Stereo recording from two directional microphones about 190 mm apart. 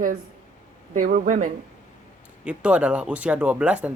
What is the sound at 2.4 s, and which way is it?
Speech, 5° right (ahead or behind).